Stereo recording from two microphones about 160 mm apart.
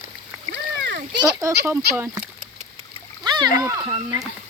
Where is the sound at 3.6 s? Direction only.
15° right (ahead or behind).